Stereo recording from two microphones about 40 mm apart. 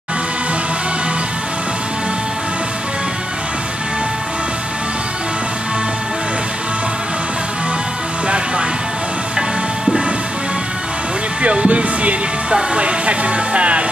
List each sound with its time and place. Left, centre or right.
11.4 s music: right
12.7 s speech: right